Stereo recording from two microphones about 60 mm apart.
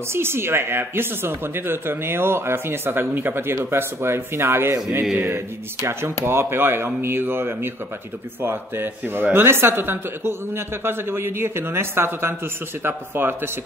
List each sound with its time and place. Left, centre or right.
0.1 s speech: right
5.8 s speech: right